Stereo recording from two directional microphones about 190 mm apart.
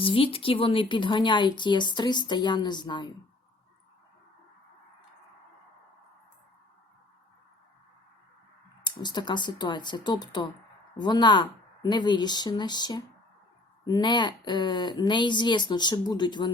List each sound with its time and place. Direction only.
0.0 s speech: 30° left (ahead or behind)
8.8 s speech: 25° left (ahead or behind)